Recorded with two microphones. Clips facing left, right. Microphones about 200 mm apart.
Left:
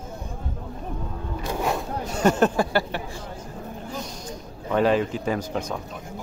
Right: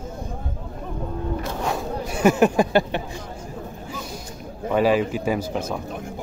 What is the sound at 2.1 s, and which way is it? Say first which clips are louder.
Speech: right 3 dB; 10° right (ahead or behind).